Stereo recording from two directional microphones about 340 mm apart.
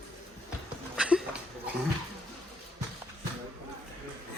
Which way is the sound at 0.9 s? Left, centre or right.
Centre.